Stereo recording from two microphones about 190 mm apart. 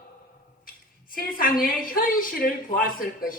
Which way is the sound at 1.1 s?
50° left (ahead or behind).